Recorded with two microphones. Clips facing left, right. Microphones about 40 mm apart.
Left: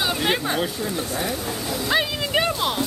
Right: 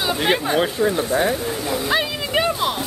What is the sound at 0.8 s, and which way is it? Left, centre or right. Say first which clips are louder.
Speech: right 8 dB; right.